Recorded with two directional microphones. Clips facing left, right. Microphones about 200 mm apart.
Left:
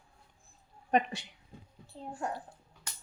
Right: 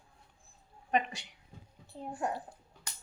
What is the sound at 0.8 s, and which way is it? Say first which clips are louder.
Speech: left 3 dB; 35° left (ahead or behind).